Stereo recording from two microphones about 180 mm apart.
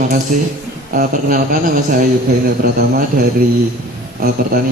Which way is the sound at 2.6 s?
60° right (ahead or behind).